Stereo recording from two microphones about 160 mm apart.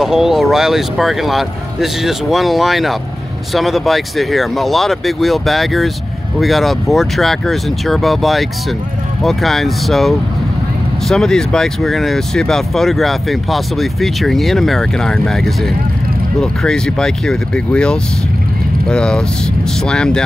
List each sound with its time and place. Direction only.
0.0 s speech: 5° right (ahead or behind)